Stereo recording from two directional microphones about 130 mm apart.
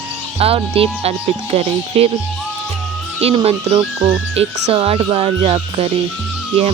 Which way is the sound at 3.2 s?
50° right (ahead or behind).